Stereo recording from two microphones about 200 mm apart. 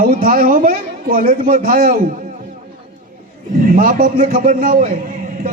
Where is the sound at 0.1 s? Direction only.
45° right (ahead or behind).